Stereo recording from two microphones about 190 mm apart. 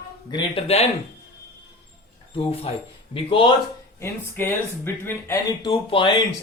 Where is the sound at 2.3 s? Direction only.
30° left (ahead or behind).